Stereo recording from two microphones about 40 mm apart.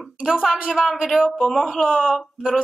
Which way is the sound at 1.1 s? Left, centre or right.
Right.